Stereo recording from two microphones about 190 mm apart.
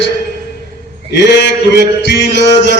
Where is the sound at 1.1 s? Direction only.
65° left (ahead or behind).